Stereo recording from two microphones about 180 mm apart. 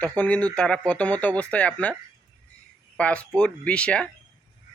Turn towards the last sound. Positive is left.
turn(degrees=5)  # may be behind; listen again after turning